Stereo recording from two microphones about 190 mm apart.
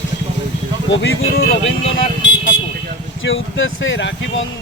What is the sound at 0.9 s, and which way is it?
Speech, 75° left (ahead or behind).